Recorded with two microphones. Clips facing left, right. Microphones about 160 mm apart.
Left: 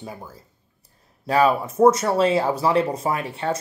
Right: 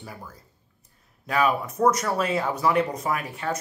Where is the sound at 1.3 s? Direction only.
30° left (ahead or behind).